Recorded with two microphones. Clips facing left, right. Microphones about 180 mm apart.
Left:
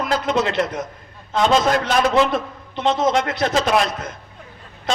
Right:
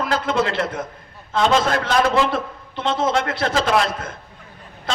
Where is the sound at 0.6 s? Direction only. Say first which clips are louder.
Even; 30° right (ahead or behind).